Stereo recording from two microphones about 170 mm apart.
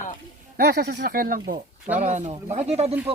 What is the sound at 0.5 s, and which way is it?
Speech, 70° right (ahead or behind).